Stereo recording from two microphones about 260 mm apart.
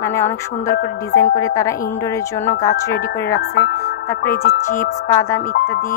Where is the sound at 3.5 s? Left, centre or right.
Left.